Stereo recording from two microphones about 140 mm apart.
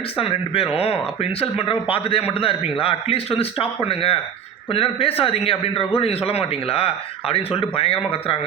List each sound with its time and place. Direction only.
0.2 s a man's voice: 40° left (ahead or behind)